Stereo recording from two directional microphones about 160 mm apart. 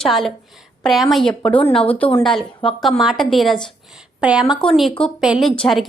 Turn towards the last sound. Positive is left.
turn(degrees=5)  # may be behind; listen again after turning